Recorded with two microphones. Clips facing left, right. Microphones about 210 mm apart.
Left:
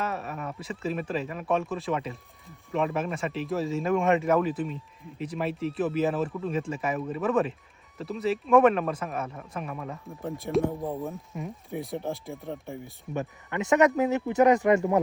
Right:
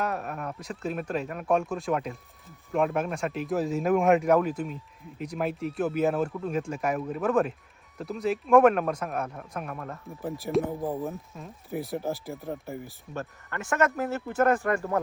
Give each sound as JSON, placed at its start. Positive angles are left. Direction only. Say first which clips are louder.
{"t": 0.0, "sound": "speech", "louder": "right 1 dB", "side_deg": 0}
{"t": 13.1, "sound": "speech", "louder": "left 5 dB", "side_deg": 20}